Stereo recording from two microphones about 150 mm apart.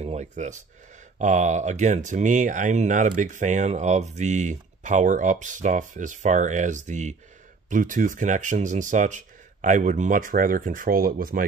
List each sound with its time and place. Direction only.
0.0 s speech: 50° right (ahead or behind); by 11.4 s 75° right (ahead or behind)